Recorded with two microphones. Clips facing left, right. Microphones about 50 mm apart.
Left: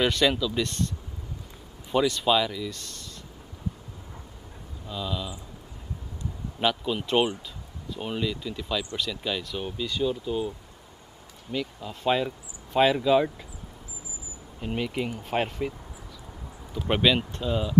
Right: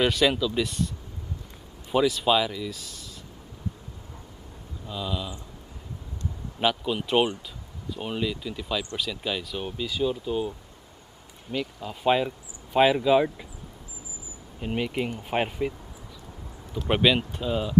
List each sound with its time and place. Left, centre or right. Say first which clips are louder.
0.0 s speech: right 1 dB; centre
4.8 s speech: even; centre
6.6 s speech: right 1 dB; centre
11.5 s speech: right 1 dB; centre
14.6 s speech: right 1 dB; centre
16.8 s speech: right 1 dB; centre